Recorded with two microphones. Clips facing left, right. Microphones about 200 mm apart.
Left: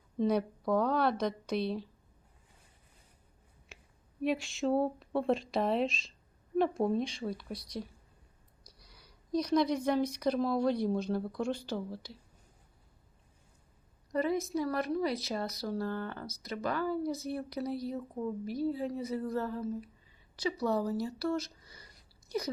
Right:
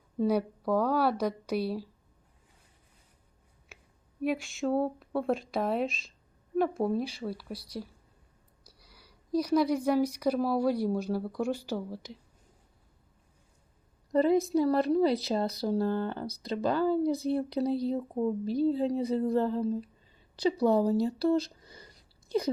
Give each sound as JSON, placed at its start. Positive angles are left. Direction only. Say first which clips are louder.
{"t": 0.2, "sound": "speech", "louder": "right 2 dB", "side_deg": -10}
{"t": 4.2, "sound": "speech", "louder": "right 1 dB", "side_deg": 0}
{"t": 8.6, "sound": "speech", "louder": "right 1 dB", "side_deg": -5}
{"t": 14.1, "sound": "a woman's voice", "louder": "right 7 dB", "side_deg": -30}